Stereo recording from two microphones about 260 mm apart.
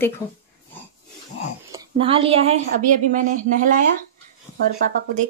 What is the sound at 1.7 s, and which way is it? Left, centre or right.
Speech, right.